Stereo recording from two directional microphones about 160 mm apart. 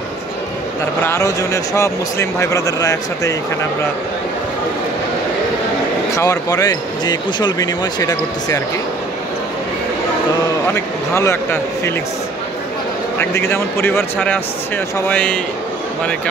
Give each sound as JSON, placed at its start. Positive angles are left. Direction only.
{"t": 1.0, "sound": "speech", "side_deg": 20}
{"t": 6.1, "sound": "speech", "side_deg": 20}
{"t": 10.7, "sound": "speech", "side_deg": 15}
{"t": 13.2, "sound": "speech", "side_deg": 15}